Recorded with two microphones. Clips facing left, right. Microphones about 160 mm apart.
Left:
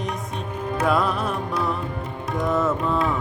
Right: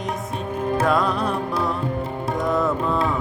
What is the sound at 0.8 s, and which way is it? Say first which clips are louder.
Music: left 1 dB; centre (ahead or behind).